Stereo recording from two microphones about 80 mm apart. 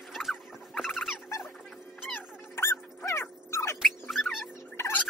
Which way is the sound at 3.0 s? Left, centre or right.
Left.